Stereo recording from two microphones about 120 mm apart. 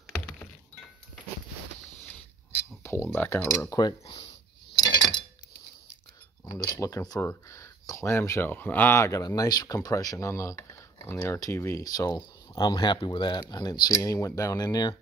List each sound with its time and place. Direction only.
0.0 s a sound: 15° left (ahead or behind)
2.8 s speech: 20° left (ahead or behind)
4.7 s coin: 35° left (ahead or behind)
6.4 s speech: 25° left (ahead or behind)